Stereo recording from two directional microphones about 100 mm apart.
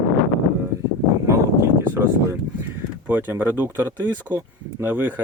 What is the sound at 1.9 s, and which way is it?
Speech, 20° right (ahead or behind).